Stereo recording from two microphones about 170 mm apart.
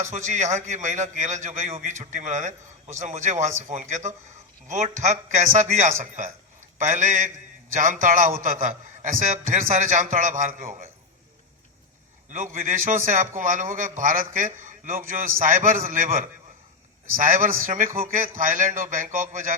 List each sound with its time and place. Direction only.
0.0 s a man's voice: 45° right (ahead or behind)
12.5 s a man's voice: 50° right (ahead or behind)